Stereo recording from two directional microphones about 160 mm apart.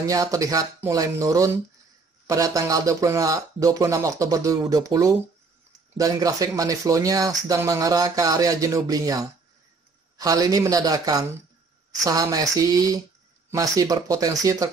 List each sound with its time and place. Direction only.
0.0 s speech: 20° right (ahead or behind)